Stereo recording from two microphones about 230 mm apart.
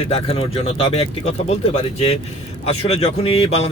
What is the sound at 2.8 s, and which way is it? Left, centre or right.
Speech, left.